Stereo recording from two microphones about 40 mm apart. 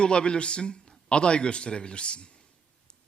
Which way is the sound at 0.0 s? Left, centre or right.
Left.